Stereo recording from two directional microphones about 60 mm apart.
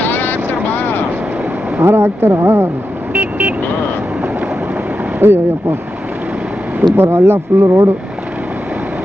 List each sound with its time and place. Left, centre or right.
0.0 s vehicle: left
1.8 s speech: right
3.1 s vehicle: right
5.2 s speech: right
6.9 s speech: right